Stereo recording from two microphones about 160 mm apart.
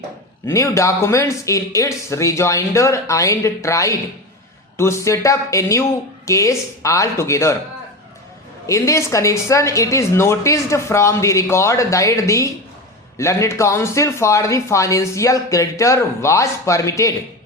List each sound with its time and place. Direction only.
0.4 s a man's voice: 20° left (ahead or behind)
8.6 s a man's voice: 20° left (ahead or behind)